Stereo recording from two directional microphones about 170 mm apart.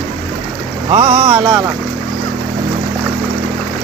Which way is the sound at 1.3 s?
25° right (ahead or behind).